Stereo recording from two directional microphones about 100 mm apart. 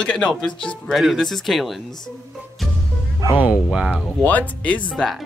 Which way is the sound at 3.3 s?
15° right (ahead or behind).